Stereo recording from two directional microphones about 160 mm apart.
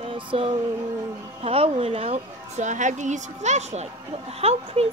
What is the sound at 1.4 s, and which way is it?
A woman's voice, 35° right (ahead or behind).